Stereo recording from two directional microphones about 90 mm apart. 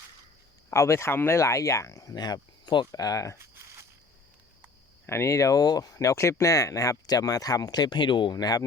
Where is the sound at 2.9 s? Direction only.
40° left (ahead or behind).